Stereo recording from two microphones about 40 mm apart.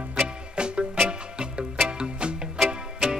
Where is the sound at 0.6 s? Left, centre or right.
Right.